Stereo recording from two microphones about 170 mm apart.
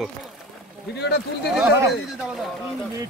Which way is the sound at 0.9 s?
80° left.